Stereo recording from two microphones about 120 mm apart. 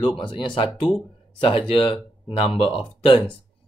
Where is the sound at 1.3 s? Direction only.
55° left (ahead or behind).